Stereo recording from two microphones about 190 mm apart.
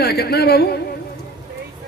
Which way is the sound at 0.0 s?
55° left (ahead or behind).